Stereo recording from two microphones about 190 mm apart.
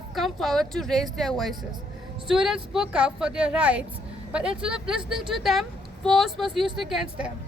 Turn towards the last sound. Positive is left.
turn(degrees=0)  # may be behind; listen again after turning